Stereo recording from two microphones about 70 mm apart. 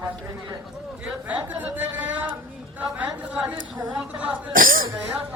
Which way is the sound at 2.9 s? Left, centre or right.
Right.